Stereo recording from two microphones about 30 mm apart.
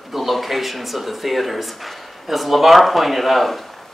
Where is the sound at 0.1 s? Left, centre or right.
Centre.